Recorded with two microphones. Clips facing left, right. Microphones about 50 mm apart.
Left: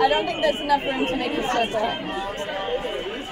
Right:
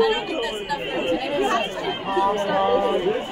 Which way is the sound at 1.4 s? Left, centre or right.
Right.